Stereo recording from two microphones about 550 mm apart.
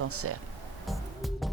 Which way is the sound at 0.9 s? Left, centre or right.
Centre.